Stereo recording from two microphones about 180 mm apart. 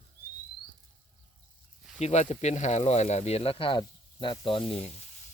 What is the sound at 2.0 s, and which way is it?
Speech, 40° left (ahead or behind).